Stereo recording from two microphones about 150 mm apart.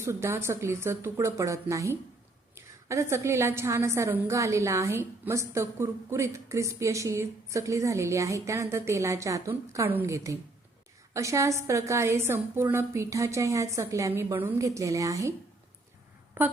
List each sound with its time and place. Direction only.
0.0 s a woman's voice: 15° right (ahead or behind)
16.4 s speech: 15° right (ahead or behind)